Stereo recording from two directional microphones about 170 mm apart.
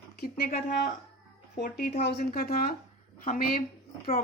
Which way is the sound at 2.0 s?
70° left (ahead or behind).